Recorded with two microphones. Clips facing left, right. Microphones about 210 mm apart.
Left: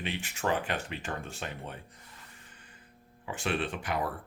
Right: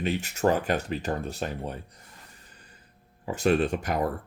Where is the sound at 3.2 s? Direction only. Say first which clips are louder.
Right 9 dB; 40° right (ahead or behind).